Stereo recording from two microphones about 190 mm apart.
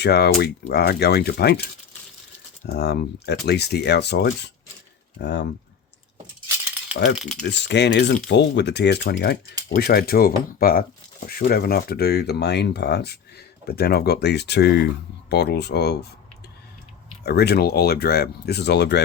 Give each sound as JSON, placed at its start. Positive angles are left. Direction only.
{"t": 0.0, "sound": "speech", "side_deg": 60}
{"t": 2.6, "sound": "speech", "side_deg": 60}
{"t": 7.2, "sound": "speech", "side_deg": 0}
{"t": 7.5, "sound": "speech", "side_deg": 65}
{"t": 17.2, "sound": "speech", "side_deg": 55}